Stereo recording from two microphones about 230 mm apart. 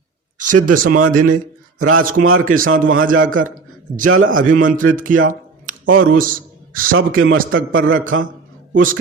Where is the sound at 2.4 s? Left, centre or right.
Right.